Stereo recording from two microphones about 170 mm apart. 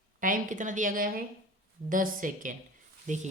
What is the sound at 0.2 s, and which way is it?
A woman's voice, 50° right (ahead or behind).